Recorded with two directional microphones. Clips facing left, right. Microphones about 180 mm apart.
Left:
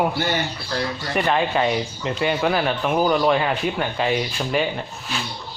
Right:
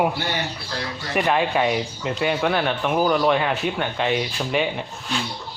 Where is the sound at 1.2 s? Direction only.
5° right (ahead or behind).